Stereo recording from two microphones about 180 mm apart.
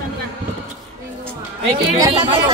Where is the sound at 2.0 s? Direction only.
20° right (ahead or behind).